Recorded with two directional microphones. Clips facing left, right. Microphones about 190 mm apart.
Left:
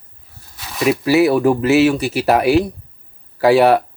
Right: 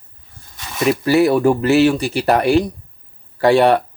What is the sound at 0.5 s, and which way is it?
Speech, centre (ahead or behind).